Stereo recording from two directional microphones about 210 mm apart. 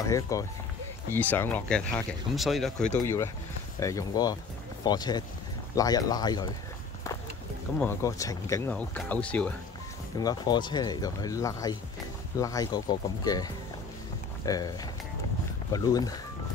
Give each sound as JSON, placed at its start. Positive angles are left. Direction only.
{"t": 0.0, "sound": "speech", "side_deg": 15}
{"t": 3.8, "sound": "speech", "side_deg": 15}
{"t": 7.8, "sound": "speech", "side_deg": 15}
{"t": 10.1, "sound": "speech", "side_deg": 20}